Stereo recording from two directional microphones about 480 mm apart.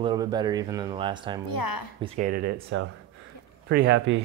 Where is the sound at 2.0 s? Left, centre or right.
Centre.